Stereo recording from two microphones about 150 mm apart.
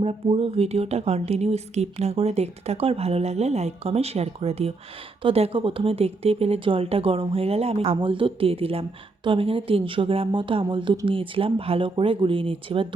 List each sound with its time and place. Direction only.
0.0 s a woman's voice: 40° right (ahead or behind)